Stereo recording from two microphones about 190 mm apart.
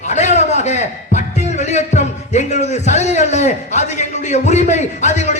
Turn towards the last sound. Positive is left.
turn(degrees=40)  # may be behind; listen again after turning